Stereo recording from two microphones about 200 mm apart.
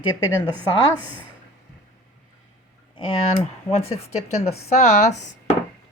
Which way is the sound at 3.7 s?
30° left (ahead or behind).